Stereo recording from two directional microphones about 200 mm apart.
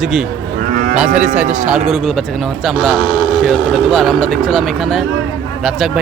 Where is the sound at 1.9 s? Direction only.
Centre (ahead or behind).